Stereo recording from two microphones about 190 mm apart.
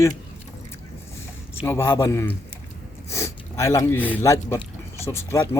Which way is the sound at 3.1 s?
15° left (ahead or behind).